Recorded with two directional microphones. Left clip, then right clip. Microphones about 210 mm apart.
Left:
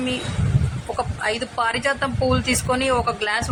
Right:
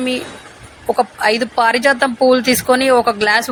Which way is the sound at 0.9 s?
15° right (ahead or behind).